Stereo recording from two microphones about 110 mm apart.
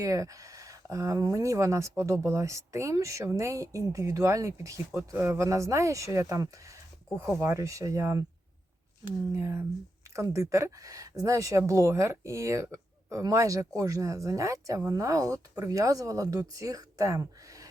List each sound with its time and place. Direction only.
0.0 s speech: 30° right (ahead or behind)
9.3 s speech: 25° right (ahead or behind)